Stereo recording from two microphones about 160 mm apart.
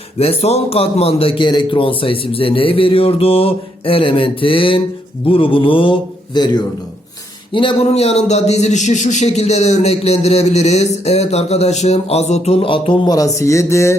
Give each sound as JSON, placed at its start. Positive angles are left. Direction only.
{"t": 0.2, "sound": "a man's voice", "side_deg": 40}